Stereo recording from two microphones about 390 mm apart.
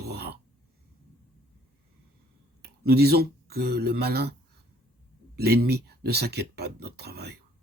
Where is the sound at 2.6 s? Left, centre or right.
Right.